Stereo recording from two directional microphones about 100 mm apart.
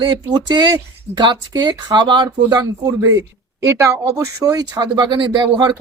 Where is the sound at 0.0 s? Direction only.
50° right (ahead or behind).